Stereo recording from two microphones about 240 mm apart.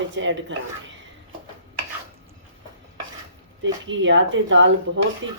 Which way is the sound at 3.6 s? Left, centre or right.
Right.